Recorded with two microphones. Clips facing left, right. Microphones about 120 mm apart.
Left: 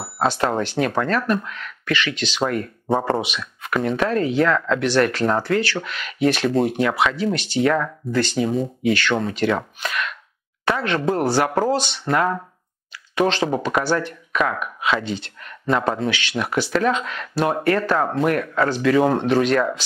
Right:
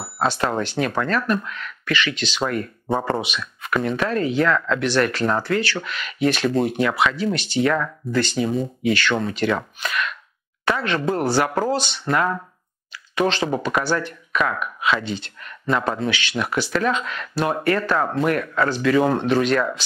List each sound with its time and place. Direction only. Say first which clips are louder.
0.2 s speech: left 1 dB; 30° left (ahead or behind); by 2.4 s 55° left (ahead or behind)
2.4 s speech: left 2 dB; 35° left (ahead or behind)
6.5 s speech: left 1 dB; 35° left (ahead or behind)
7.6 s speech: left 2 dB; 35° left (ahead or behind)
11.7 s speech: left 2 dB; 20° left (ahead or behind)
12.1 s speech: left 1 dB; 35° left (ahead or behind)
16.1 s speech: even; 50° left (ahead or behind)
16.3 s speech: left 2 dB; 35° left (ahead or behind)